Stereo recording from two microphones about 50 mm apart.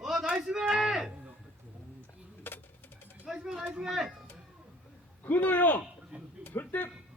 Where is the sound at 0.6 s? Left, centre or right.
Centre.